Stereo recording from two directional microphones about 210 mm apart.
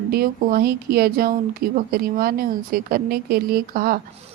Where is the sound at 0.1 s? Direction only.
45° right (ahead or behind).